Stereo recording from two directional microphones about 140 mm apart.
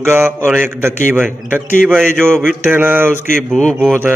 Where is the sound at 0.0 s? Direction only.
15° right (ahead or behind).